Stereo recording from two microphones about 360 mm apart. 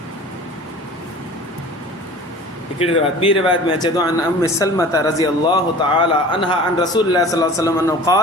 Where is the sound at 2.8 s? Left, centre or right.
Centre.